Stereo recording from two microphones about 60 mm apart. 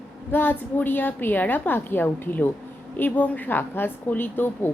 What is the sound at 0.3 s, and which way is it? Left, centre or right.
A woman's voice, left.